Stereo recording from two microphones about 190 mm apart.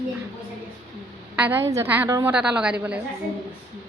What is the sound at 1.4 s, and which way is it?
A woman's voice, 10° right (ahead or behind).